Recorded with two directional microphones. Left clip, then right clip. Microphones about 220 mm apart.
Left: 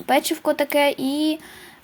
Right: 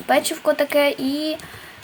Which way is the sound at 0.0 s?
40° left (ahead or behind).